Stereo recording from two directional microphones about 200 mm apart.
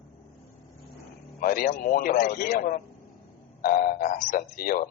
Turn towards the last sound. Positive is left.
turn(degrees=45)  # may be behind; listen again after turning